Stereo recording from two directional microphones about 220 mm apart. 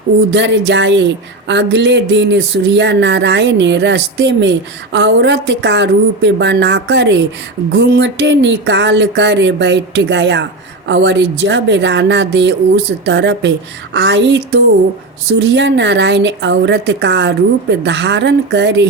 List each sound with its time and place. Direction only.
0.3 s speech: 55° right (ahead or behind)